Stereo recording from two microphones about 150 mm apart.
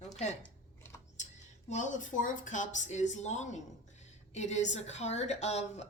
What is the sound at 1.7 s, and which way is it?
A woman's voice, 55° left (ahead or behind).